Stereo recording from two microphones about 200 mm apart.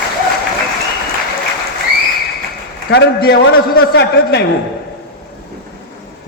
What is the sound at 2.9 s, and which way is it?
A man's voice, 55° left (ahead or behind).